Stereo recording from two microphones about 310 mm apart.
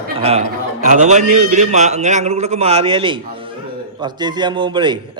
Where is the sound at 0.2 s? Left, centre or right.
Centre.